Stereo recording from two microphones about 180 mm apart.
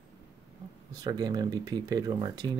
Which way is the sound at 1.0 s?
20° right (ahead or behind).